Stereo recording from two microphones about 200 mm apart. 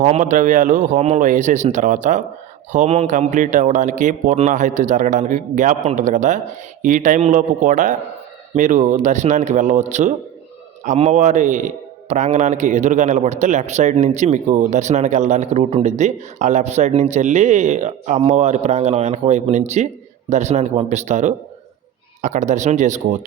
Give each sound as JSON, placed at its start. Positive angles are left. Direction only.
{"t": 0.0, "sound": "a man's voice", "side_deg": -35}